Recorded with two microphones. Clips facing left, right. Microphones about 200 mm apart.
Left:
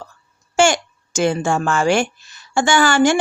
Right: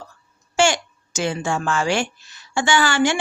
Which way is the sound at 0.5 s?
50° left (ahead or behind).